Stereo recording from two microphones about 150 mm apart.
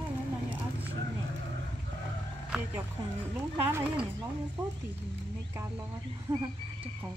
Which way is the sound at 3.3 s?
15° right (ahead or behind).